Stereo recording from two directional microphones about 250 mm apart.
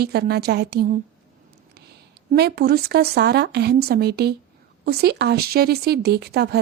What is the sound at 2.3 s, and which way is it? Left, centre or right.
A woman's voice, right.